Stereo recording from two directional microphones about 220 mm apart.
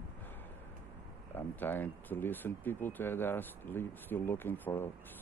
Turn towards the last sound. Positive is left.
turn(degrees=10)  # may be behind; listen again after turning